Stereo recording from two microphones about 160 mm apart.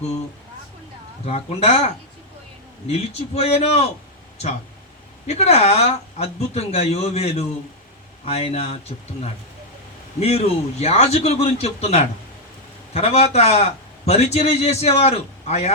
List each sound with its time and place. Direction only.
1.2 s a man's voice: 40° left (ahead or behind)
2.9 s a man's voice: 40° left (ahead or behind)
5.2 s a man's voice: 40° left (ahead or behind)
10.2 s a man's voice: 40° left (ahead or behind)